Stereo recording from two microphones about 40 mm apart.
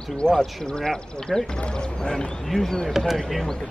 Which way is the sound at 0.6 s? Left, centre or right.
Centre.